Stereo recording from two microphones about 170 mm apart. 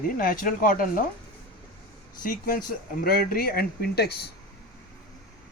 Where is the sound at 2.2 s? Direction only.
55° left (ahead or behind); by 4.3 s 70° left (ahead or behind).